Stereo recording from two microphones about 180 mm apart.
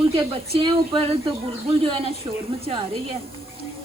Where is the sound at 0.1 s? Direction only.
30° right (ahead or behind).